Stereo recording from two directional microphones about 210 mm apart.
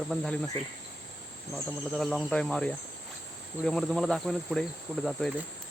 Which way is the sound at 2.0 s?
Centre (ahead or behind).